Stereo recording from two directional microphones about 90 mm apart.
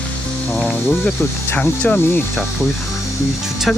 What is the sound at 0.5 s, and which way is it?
Music, 5° left (ahead or behind).